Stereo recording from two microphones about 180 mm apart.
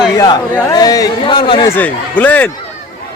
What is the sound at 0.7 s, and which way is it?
Speech, 20° left (ahead or behind).